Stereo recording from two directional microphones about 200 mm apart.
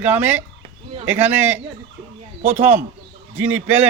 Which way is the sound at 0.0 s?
10° right (ahead or behind).